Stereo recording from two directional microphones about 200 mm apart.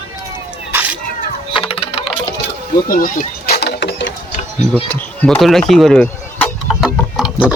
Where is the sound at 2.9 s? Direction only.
45° left (ahead or behind); by 4.1 s 60° left (ahead or behind).